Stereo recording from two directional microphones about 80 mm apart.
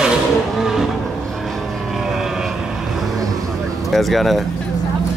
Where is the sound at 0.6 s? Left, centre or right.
Centre.